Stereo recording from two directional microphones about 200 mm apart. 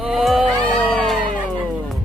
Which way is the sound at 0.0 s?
Centre (ahead or behind).